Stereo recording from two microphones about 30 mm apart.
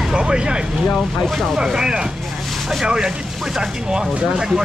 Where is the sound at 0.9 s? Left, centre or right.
Centre.